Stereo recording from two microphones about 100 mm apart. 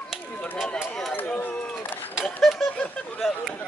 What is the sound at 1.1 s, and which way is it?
Speech, 20° left (ahead or behind).